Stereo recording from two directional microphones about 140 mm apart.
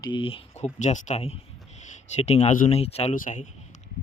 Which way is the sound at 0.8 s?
60° left (ahead or behind).